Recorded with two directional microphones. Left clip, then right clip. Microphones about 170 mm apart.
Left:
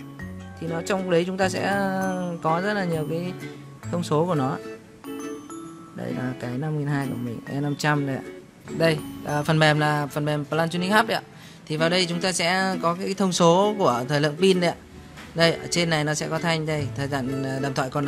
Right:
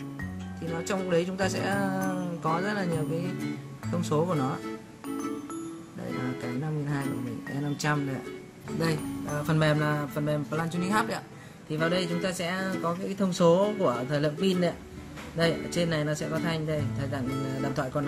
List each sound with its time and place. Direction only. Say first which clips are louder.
0.7 s speech: left 5 dB; 70° left (ahead or behind)
3.9 s speech: left 5 dB; 70° left (ahead or behind)
6.6 s speech: left 5 dB; 75° left (ahead or behind)
9.3 s speech: left 7 dB; 60° left (ahead or behind)
11.7 s speech: left 5 dB; 70° left (ahead or behind)
15.3 s speech: left 6 dB; 85° left